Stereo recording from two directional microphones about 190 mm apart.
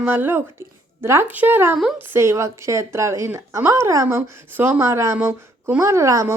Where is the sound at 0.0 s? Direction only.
10° right (ahead or behind).